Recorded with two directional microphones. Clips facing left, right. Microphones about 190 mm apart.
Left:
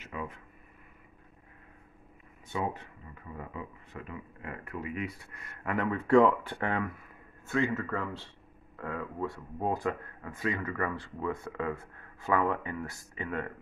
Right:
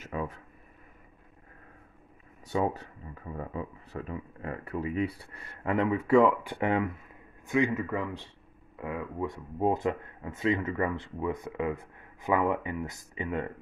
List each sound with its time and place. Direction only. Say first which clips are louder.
0.0 s a sound: right 5 dB; 40° right (ahead or behind)
2.4 s speech: right 5 dB; 40° right (ahead or behind)
5.9 s speech: even; 5° right (ahead or behind)